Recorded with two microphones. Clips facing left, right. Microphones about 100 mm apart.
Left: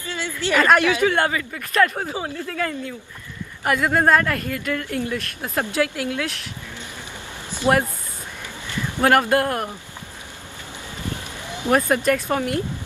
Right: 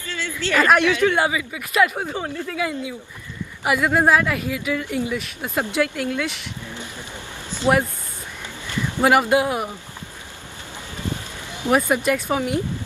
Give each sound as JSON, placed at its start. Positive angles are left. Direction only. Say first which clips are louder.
{"t": 0.0, "sound": "a woman's voice", "louder": "left 1 dB", "side_deg": 15}
{"t": 0.7, "sound": "a woman's voice", "louder": "right 1 dB", "side_deg": 0}
{"t": 2.5, "sound": "a woman's voice", "louder": "right 1 dB", "side_deg": -10}
{"t": 7.6, "sound": "speech", "louder": "even", "side_deg": 20}
{"t": 9.0, "sound": "a woman's voice", "louder": "even", "side_deg": -10}
{"t": 11.7, "sound": "speech", "louder": "even", "side_deg": -5}